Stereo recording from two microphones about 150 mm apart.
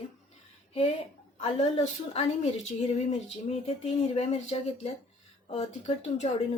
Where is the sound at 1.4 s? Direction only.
45° left (ahead or behind).